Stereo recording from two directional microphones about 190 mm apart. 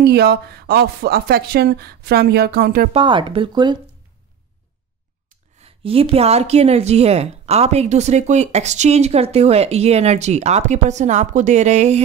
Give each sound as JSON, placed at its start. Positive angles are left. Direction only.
{"t": 0.0, "sound": "speech", "side_deg": -60}
{"t": 2.9, "sound": "speech", "side_deg": -25}
{"t": 5.6, "sound": "speech", "side_deg": -30}